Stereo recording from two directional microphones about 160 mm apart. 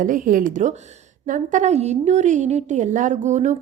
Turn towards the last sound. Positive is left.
turn(degrees=-50)  # may be behind; listen again after turning